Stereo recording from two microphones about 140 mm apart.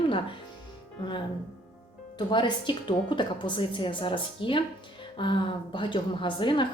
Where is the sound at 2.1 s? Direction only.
35° left (ahead or behind).